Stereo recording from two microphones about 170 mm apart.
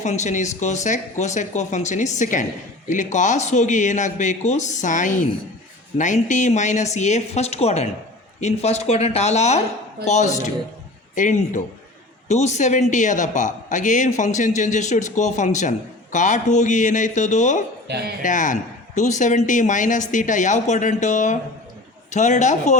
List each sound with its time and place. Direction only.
0.0 s a man's voice: 45° left (ahead or behind)
17.8 s speech: 75° right (ahead or behind)
18.2 s a man's voice: 50° left (ahead or behind)